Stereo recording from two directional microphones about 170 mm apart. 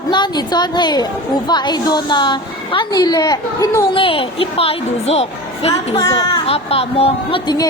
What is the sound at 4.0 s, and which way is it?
A woman's voice, 30° left (ahead or behind).